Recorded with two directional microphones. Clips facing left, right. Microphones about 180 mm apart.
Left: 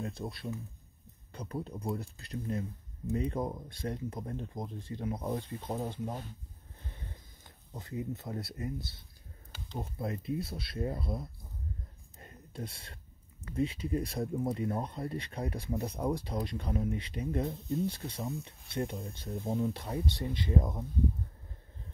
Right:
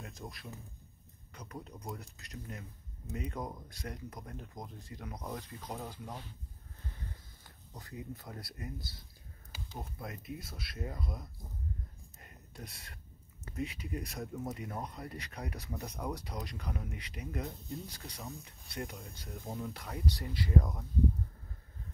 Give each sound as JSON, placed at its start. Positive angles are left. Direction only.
{"t": 0.0, "sound": "speech", "side_deg": 30}
{"t": 7.7, "sound": "speech", "side_deg": 25}
{"t": 12.2, "sound": "a sound", "side_deg": 30}
{"t": 13.6, "sound": "speech", "side_deg": 30}